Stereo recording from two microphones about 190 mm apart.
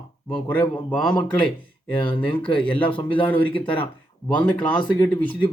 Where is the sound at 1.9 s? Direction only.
25° left (ahead or behind).